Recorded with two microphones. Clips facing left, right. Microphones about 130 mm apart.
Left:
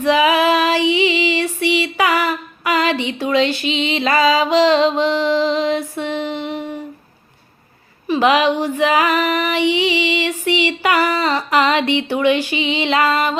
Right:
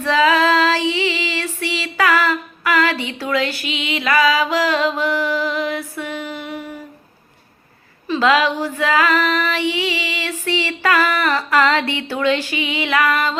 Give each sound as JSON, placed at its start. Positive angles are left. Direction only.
{"t": 0.0, "sound": "female singing", "side_deg": 15}
{"t": 8.0, "sound": "female singing", "side_deg": 15}